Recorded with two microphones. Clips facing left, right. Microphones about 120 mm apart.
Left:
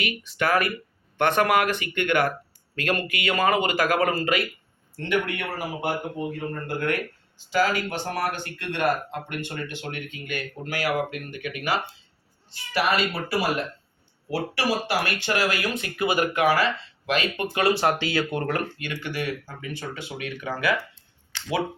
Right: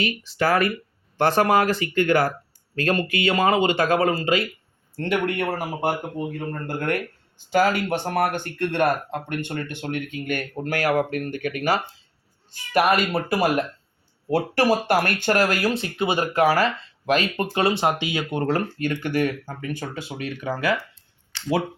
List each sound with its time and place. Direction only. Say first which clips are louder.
0.0 s speech: right 3 dB; 30° right (ahead or behind)
4.9 s speech: right 3 dB; 45° right (ahead or behind)
7.3 s speech: right 3 dB; 50° right (ahead or behind)
12.5 s speech: right 5 dB; 50° right (ahead or behind); by 18.6 s 25° right (ahead or behind)
18.8 s speech: right 8 dB; 45° right (ahead or behind)